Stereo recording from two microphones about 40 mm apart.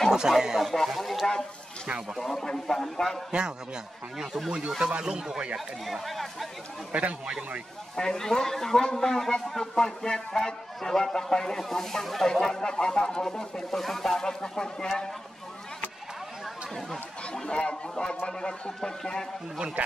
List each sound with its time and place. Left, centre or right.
0.1 s speech: centre
2.4 s speech: centre
3.3 s speech: centre
4.2 s speech: centre
4.5 s speech: right
5.9 s speech: centre
6.9 s speech: right
7.9 s speech: centre
17.3 s speech: left